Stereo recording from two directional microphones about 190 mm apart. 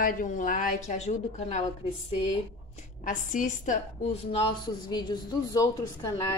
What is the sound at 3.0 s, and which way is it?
Speech, 40° left (ahead or behind).